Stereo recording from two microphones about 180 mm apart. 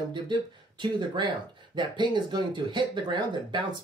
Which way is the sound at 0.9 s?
25° right (ahead or behind).